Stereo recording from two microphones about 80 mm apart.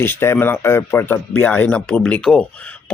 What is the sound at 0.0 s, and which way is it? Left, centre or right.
A man's voice, left.